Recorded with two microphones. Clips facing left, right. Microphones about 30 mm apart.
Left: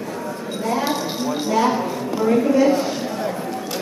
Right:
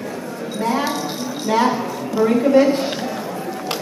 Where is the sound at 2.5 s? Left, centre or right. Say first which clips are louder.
Right 2 dB; right.